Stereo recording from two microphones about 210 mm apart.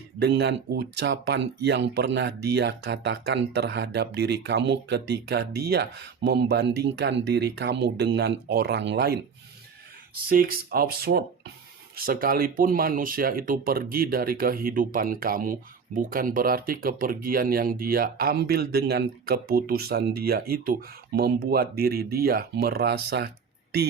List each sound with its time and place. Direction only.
0.2 s speech: 55° right (ahead or behind)
10.2 s speech: 45° right (ahead or behind)